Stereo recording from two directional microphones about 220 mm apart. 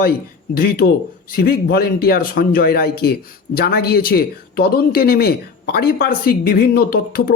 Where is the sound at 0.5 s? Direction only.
45° left (ahead or behind).